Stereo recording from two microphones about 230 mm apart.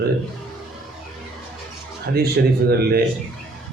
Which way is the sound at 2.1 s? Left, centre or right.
Right.